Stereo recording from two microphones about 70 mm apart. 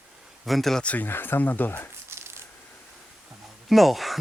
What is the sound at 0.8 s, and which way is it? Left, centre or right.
Speech, left.